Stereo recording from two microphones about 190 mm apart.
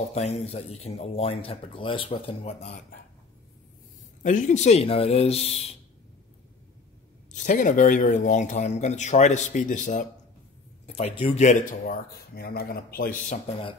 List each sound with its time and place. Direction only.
0.1 s speech: 35° left (ahead or behind)
2.6 s speech: 45° left (ahead or behind)
4.2 s speech: 40° left (ahead or behind)
7.2 s speech: 40° left (ahead or behind)
10.9 s speech: 30° left (ahead or behind)